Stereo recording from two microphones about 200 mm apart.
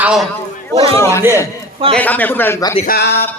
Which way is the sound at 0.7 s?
30° right (ahead or behind).